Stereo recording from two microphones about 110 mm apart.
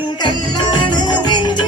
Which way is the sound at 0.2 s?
40° left (ahead or behind).